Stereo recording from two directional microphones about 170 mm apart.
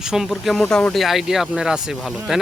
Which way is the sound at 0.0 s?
5° right (ahead or behind).